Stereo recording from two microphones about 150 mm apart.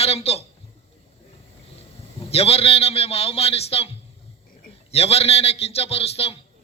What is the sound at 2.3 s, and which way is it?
A man's voice, 40° left (ahead or behind).